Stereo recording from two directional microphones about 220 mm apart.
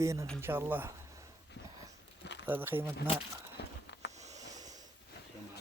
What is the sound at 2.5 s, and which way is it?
Speech, 10° right (ahead or behind).